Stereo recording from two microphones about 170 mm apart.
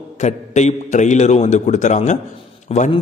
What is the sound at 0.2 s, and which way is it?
A man's voice, 45° left (ahead or behind).